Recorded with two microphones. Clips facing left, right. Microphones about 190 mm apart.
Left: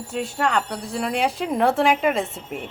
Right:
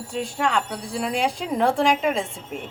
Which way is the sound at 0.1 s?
Centre (ahead or behind).